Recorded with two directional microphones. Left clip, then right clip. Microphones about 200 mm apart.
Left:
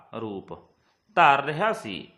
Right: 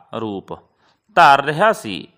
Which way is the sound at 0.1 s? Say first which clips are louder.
Right 9 dB; 50° right (ahead or behind).